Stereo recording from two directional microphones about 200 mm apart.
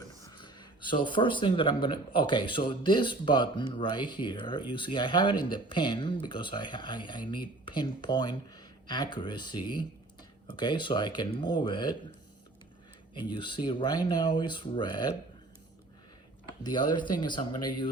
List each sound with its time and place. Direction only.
0.3 s speech: 25° left (ahead or behind)
13.1 s speech: 20° left (ahead or behind)
16.6 s speech: 20° left (ahead or behind)